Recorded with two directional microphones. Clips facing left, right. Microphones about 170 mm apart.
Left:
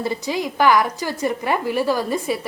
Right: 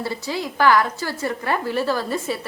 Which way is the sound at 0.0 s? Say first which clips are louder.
Left 3 dB; 15° left (ahead or behind).